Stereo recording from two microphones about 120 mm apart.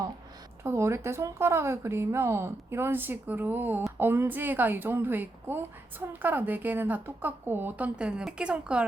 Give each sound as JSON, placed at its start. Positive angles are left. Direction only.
{"t": 0.6, "sound": "a woman's voice", "side_deg": -20}